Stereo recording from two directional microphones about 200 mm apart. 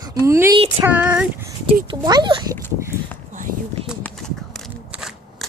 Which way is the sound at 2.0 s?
20° right (ahead or behind).